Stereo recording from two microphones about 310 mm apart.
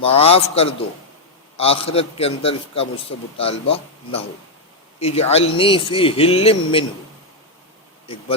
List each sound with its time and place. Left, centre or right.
0.0 s a man's voice: centre
8.0 s speech: centre